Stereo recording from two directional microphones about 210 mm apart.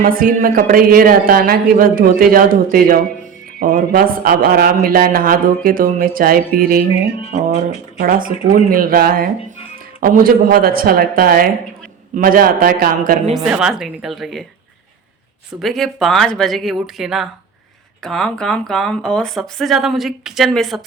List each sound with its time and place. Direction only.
0.0 s a man's voice: 40° right (ahead or behind)
13.3 s speech: 5° right (ahead or behind)
15.6 s speech: centre (ahead or behind)